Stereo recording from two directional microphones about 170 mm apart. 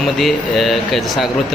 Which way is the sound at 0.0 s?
Centre (ahead or behind).